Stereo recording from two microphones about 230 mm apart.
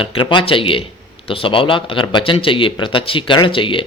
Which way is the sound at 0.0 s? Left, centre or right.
Left.